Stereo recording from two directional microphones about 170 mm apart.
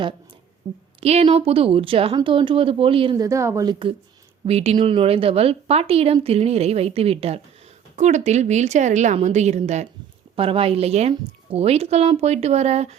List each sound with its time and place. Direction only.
1.0 s speech: 35° right (ahead or behind)
3.2 s speech: 15° right (ahead or behind)
4.4 s a woman's voice: 35° right (ahead or behind)